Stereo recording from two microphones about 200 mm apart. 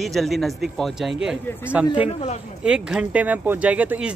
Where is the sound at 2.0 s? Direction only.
35° left (ahead or behind).